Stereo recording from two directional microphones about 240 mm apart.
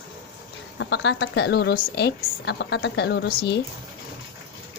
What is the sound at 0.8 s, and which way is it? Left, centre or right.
A woman's voice, left.